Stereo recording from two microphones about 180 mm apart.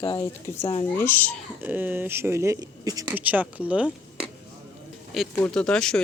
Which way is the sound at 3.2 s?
10° right (ahead or behind).